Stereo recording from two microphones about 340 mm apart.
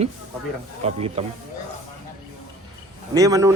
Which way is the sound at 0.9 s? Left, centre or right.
Centre.